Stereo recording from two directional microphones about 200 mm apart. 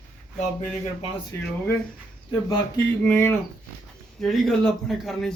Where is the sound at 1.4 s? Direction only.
10° left (ahead or behind).